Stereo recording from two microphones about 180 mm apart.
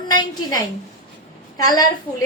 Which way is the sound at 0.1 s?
20° left (ahead or behind).